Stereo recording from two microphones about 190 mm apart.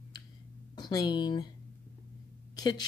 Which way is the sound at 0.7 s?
20° left (ahead or behind).